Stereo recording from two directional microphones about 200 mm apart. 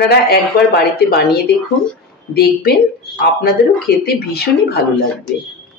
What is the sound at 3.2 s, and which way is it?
Speech, 50° left (ahead or behind).